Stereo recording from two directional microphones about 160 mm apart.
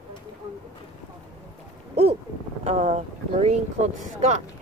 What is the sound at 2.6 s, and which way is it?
Speech, 45° right (ahead or behind).